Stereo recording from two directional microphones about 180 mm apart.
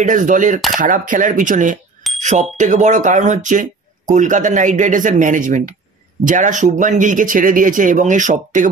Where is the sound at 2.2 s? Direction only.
40° right (ahead or behind).